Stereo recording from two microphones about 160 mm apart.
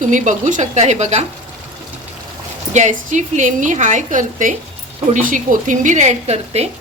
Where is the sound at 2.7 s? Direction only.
50° right (ahead or behind).